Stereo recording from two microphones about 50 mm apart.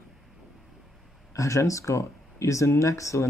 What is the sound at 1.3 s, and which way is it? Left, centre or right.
Speech, left.